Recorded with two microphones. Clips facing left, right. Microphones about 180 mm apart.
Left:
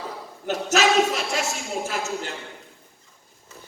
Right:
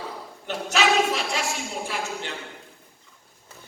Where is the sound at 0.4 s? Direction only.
40° left (ahead or behind).